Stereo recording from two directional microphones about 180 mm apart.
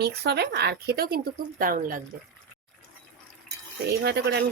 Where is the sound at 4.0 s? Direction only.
65° right (ahead or behind).